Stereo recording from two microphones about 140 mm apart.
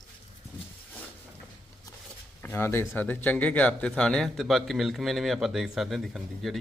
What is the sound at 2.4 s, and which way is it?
Speech, 15° left (ahead or behind).